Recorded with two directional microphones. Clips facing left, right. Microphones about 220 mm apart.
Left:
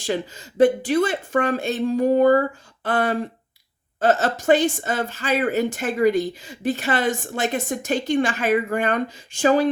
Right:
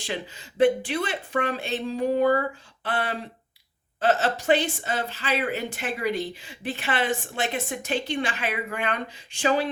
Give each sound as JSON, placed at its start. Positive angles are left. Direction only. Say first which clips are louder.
{"t": 0.0, "sound": "a woman's voice", "louder": "left 7 dB", "side_deg": 45}